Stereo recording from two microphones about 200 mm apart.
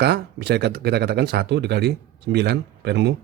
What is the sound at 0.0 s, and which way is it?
Speech, 55° right (ahead or behind).